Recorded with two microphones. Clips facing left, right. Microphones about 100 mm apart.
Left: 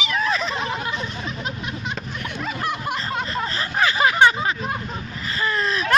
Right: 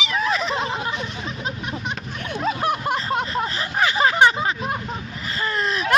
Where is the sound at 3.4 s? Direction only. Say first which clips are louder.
Even; 20° right (ahead or behind).